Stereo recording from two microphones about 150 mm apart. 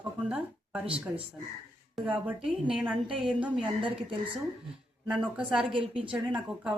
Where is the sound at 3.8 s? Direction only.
35° right (ahead or behind).